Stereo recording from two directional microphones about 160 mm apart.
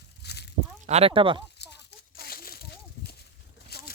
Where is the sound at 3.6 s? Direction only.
85° left.